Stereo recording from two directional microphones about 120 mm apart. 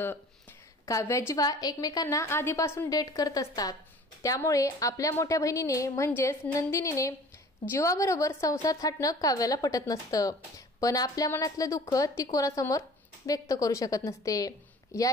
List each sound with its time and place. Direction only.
0.8 s a woman's voice: 25° left (ahead or behind)